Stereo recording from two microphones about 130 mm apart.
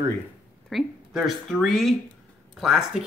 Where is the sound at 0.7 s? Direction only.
Centre (ahead or behind).